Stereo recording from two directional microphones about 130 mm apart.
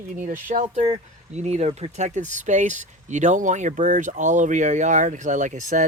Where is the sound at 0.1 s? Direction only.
90° right.